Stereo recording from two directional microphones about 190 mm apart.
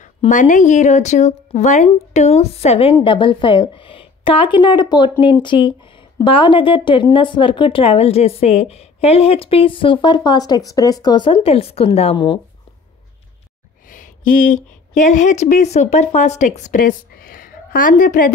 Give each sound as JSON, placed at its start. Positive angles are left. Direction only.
{"t": 0.0, "sound": "a woman's voice", "side_deg": 40}
{"t": 13.8, "sound": "speech", "side_deg": 45}